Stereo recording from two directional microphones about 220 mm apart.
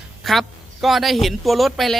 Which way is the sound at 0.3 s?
Centre (ahead or behind).